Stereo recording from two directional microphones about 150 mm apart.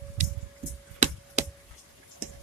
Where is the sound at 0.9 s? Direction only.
50° right (ahead or behind).